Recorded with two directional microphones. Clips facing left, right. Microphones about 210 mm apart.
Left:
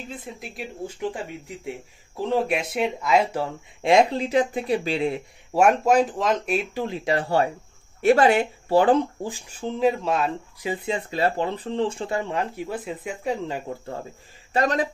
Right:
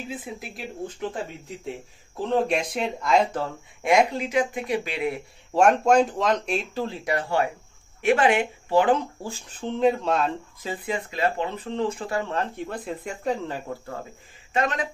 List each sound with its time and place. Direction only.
0.1 s speech: centre (ahead or behind)
2.2 s speech: 5° left (ahead or behind)
3.8 s speech: 30° left (ahead or behind)
5.5 s speech: 5° left (ahead or behind)
6.8 s speech: 20° left (ahead or behind)
9.2 s speech: 10° left (ahead or behind)
10.6 s speech: 20° left (ahead or behind)
14.5 s speech: 35° left (ahead or behind)